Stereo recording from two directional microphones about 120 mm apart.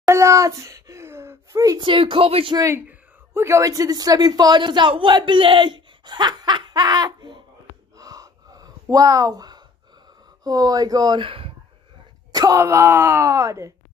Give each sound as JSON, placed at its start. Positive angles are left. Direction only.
{"t": 0.0, "sound": "a sound", "side_deg": -25}
{"t": 1.8, "sound": "speech", "side_deg": -45}
{"t": 2.5, "sound": "speech", "side_deg": -30}
{"t": 7.9, "sound": "gasp", "side_deg": -30}
{"t": 10.4, "sound": "speech", "side_deg": -30}
{"t": 12.3, "sound": "speech", "side_deg": -30}